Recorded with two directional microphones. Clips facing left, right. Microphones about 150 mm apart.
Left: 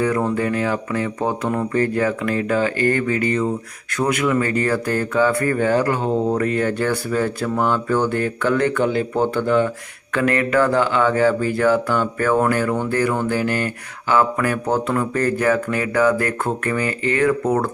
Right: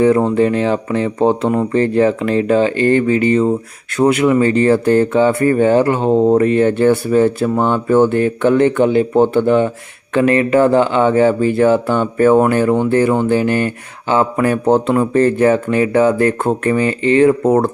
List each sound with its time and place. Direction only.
0.0 s speech: 25° right (ahead or behind)